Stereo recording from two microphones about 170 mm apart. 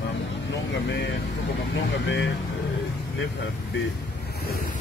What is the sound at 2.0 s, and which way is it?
Speech, 90° left.